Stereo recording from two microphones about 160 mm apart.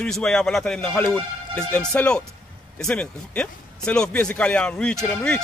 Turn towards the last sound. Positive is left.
turn(degrees=5)  # may be behind; listen again after turning